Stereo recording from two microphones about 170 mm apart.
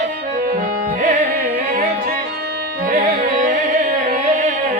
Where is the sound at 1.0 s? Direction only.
50° right (ahead or behind).